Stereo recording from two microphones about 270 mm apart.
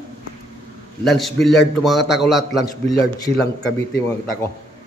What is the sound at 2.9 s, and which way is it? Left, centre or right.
Speech, centre.